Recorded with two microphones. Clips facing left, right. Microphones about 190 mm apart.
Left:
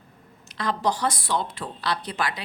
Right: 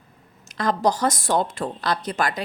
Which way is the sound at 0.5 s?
45° right (ahead or behind).